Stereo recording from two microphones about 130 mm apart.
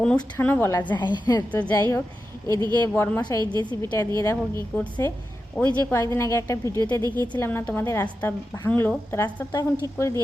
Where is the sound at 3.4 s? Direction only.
40° right (ahead or behind).